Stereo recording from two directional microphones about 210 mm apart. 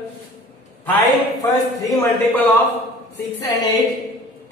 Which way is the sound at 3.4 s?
20° left (ahead or behind).